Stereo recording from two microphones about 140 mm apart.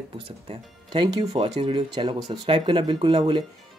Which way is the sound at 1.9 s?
35° right (ahead or behind).